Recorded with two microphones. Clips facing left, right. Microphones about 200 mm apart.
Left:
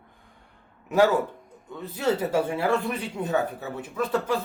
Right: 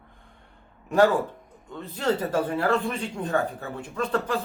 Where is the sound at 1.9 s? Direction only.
10° left (ahead or behind).